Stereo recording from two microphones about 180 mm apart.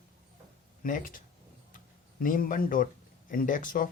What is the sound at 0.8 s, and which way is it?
Speech, 45° left (ahead or behind).